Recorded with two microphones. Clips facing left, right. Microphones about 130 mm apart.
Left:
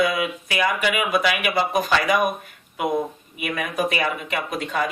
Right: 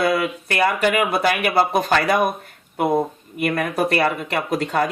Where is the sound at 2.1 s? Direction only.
30° right (ahead or behind).